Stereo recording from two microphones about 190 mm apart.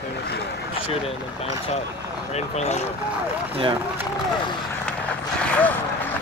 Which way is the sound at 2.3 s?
35° left (ahead or behind).